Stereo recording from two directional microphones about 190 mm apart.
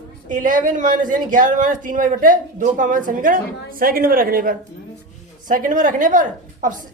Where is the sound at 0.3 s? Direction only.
45° right (ahead or behind).